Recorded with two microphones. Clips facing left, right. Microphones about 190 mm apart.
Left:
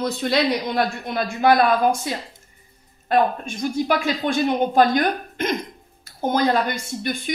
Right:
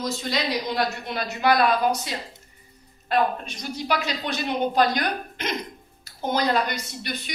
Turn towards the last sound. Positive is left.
turn(degrees=50)  # may be behind; listen again after turning